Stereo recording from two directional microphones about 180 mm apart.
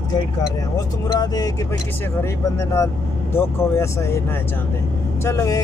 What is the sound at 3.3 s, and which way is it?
Speech, 15° left (ahead or behind).